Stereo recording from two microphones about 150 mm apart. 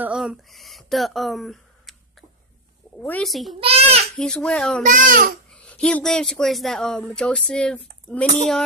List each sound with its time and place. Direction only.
0.0 s speech: 5° right (ahead or behind)
3.0 s a woman's voice: 10° left (ahead or behind)
3.3 s speech: centre (ahead or behind)
3.5 s a child's voice: 40° right (ahead or behind)
4.2 s speech: 5° left (ahead or behind)
4.8 s a child's voice: 65° right (ahead or behind)
5.5 s speech: 10° left (ahead or behind)